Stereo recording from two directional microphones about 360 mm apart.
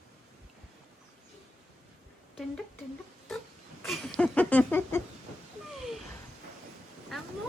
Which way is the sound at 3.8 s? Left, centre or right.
Centre.